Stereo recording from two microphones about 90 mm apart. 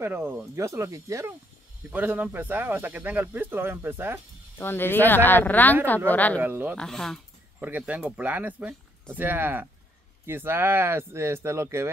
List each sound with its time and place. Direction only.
0.0 s speech: 25° right (ahead or behind)
1.9 s speech: 20° right (ahead or behind)
4.6 s speech: 25° left (ahead or behind)
6.4 s speech: 25° right (ahead or behind)
6.8 s speech: 5° left (ahead or behind)
7.6 s speech: 15° right (ahead or behind)